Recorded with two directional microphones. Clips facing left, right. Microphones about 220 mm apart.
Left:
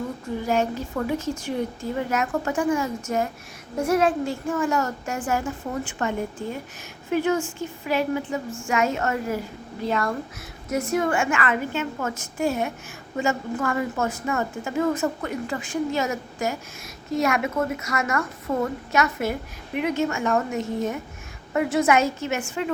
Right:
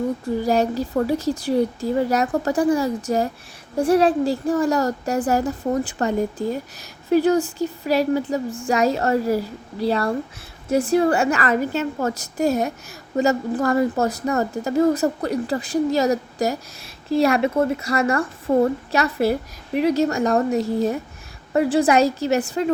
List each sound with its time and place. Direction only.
0.4 s a woman's voice: 35° right (ahead or behind)